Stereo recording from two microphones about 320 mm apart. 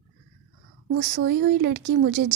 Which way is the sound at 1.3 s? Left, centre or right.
Right.